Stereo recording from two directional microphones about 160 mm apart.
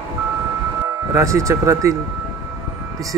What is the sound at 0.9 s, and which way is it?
Speech, 20° right (ahead or behind).